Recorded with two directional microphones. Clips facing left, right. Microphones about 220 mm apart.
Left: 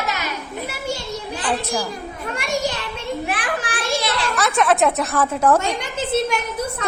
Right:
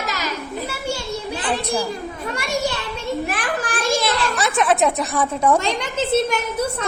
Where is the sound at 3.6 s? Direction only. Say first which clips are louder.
Right 3 dB; 40° right (ahead or behind).